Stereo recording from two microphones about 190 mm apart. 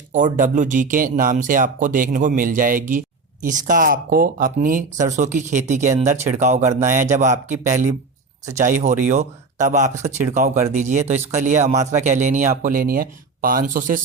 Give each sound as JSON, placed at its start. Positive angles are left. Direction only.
{"t": 0.3, "sound": "speech", "side_deg": -40}